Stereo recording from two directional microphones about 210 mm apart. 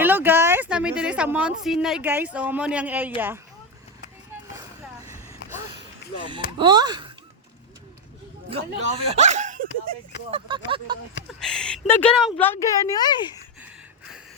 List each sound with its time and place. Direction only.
0.0 s speech: 10° right (ahead or behind)
4.5 s vehicle: 15° right (ahead or behind)
6.6 s speech: 20° right (ahead or behind)
8.4 s speech: 25° right (ahead or behind)
10.5 s speech: 20° right (ahead or behind)
11.3 s speech: 5° left (ahead or behind)